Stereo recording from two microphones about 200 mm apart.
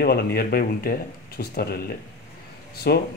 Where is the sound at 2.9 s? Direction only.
55° left (ahead or behind).